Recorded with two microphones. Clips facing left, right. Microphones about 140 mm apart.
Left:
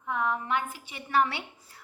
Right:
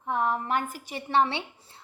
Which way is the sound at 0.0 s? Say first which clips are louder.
Right 3 dB; 35° right (ahead or behind).